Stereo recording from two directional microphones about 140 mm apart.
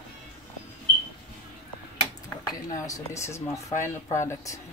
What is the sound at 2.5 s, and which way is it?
Speech, 20° left (ahead or behind).